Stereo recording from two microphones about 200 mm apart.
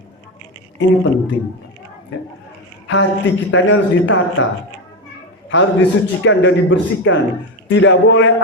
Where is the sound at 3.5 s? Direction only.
70° left (ahead or behind).